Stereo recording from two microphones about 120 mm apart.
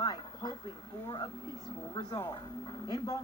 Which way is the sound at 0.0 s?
35° left (ahead or behind).